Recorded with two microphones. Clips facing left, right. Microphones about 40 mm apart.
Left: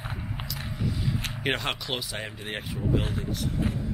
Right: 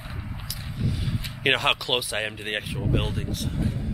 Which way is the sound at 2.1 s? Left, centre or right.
Right.